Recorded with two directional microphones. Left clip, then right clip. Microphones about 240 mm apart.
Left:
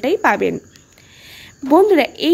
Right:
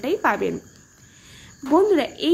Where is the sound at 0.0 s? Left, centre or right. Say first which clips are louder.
Left 6 dB; left.